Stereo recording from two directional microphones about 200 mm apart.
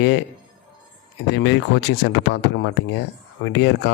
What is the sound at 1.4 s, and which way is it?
Speech, 60° left (ahead or behind).